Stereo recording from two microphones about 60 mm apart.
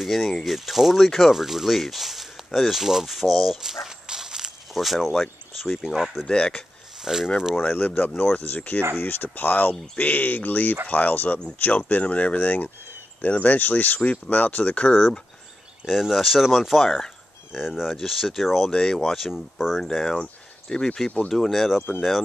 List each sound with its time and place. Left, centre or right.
0.0 s speech: centre
6.2 s speech: centre
7.1 s speech: centre
7.6 s speech: left
15.8 s speech: centre
19.8 s speech: centre